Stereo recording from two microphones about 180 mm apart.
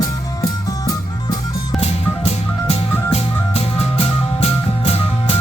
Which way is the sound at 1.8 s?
35° left (ahead or behind).